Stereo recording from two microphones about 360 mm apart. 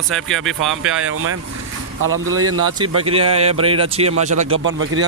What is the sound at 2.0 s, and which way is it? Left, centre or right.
Speech, right.